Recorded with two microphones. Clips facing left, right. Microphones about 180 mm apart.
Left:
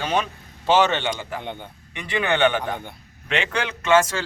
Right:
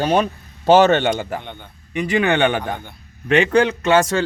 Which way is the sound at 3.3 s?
40° right (ahead or behind).